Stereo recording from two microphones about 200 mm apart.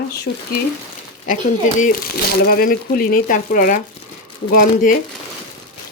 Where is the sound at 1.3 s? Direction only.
40° left (ahead or behind).